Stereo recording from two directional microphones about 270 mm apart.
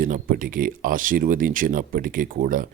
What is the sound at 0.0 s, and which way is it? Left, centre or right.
Speech, right.